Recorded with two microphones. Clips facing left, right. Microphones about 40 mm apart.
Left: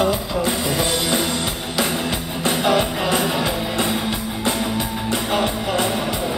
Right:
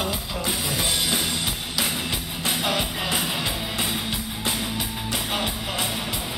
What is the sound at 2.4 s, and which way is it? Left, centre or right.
Music, centre.